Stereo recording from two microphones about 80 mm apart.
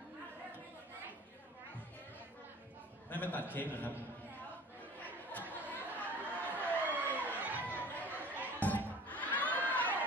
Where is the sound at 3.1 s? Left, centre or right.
Left.